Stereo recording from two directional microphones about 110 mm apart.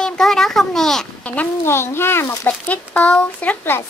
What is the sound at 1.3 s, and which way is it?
Speech, 20° left (ahead or behind).